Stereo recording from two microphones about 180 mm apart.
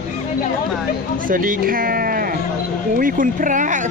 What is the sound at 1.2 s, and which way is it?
Speech, 50° right (ahead or behind).